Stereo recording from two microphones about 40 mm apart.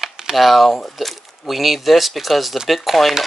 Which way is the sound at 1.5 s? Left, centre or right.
Centre.